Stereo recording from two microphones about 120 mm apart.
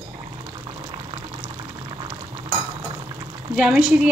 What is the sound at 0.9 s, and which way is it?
Boiling, 35° right (ahead or behind).